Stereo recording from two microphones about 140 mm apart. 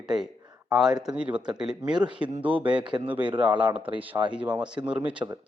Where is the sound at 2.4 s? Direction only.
10° right (ahead or behind).